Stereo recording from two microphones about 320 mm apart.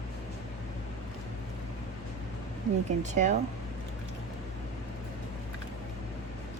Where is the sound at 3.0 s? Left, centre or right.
Right.